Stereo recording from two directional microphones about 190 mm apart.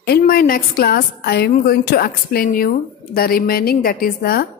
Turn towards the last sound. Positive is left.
turn(degrees=50)  # may be behind; listen again after turning